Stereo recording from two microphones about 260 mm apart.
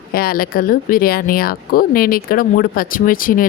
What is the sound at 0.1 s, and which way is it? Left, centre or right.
Speech, left.